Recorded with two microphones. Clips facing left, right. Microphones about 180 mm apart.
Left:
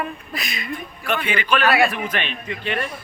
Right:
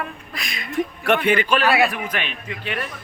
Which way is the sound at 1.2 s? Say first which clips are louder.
Right 1 dB; 45° right (ahead or behind).